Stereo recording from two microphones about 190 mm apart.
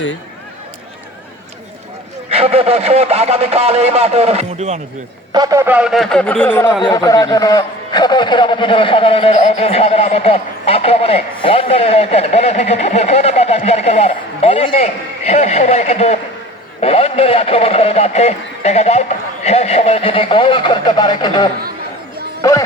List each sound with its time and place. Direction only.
2.3 s speech: 30° right (ahead or behind)
5.3 s a man's voice: 20° right (ahead or behind); by 21.5 s 25° left (ahead or behind)